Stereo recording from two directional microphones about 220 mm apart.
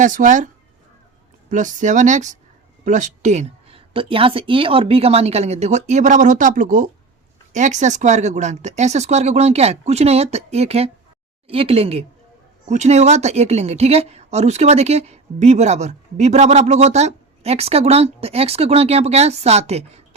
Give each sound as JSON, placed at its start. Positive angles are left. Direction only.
{"t": 0.0, "sound": "a woman's voice", "side_deg": -35}